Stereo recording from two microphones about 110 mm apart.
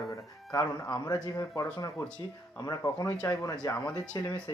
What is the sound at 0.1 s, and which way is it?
Speech, 30° left (ahead or behind).